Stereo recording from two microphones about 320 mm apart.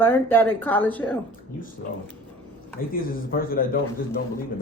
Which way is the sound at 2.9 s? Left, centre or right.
Left.